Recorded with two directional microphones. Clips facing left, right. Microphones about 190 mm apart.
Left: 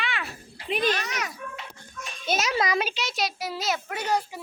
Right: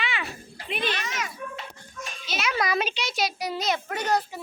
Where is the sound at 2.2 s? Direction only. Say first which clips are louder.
Left 4 dB; 45° left (ahead or behind).